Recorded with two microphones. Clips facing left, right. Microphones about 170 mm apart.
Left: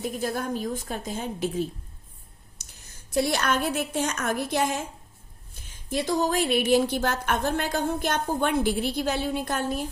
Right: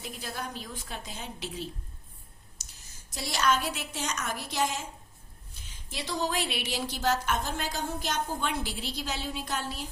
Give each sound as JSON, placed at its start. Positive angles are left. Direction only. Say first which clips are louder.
{"t": 0.0, "sound": "a woman's voice", "louder": "left 9 dB", "side_deg": 45}